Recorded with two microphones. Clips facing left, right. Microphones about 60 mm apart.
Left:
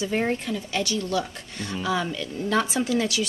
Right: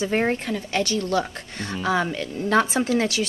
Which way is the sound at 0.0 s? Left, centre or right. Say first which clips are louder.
Right 3 dB; right.